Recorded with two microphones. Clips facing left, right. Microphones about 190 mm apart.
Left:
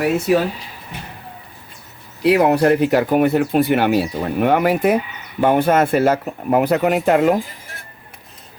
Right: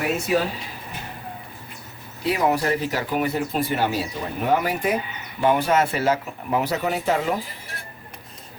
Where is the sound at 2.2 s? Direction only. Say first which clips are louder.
Left 8 dB; 65° left (ahead or behind).